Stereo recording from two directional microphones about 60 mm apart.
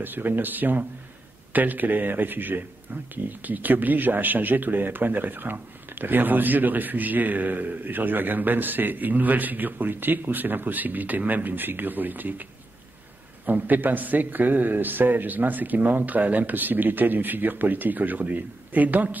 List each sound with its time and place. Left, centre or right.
0.0 s speech: right
13.5 s a man's voice: right